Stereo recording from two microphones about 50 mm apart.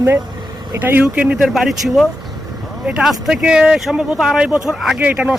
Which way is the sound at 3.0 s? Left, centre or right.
Centre.